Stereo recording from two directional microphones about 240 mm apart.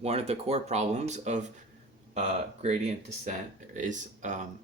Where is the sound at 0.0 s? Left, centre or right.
Right.